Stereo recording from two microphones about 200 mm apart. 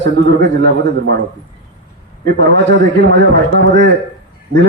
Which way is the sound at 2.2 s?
60° right (ahead or behind).